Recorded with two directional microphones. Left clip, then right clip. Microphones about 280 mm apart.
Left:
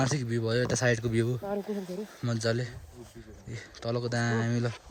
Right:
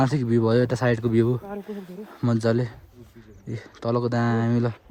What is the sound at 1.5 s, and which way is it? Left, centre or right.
Speech, left.